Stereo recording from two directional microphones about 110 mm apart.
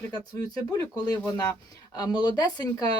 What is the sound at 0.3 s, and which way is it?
Speech, 35° left (ahead or behind).